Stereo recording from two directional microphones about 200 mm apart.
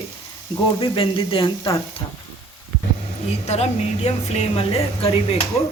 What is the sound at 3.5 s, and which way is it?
Speech, 30° left (ahead or behind).